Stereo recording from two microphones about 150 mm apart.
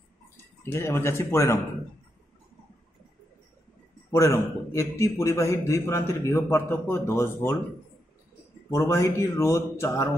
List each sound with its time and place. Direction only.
0.6 s speech: 15° left (ahead or behind)
4.1 s a man's voice: 20° left (ahead or behind)
8.6 s a man's voice: 20° left (ahead or behind)